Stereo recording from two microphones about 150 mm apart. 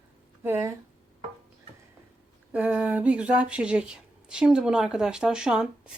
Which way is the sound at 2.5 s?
10° right (ahead or behind).